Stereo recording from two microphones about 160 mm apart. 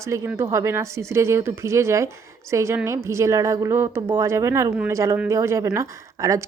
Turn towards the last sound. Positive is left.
turn(degrees=-20)  # may be behind; listen again after turning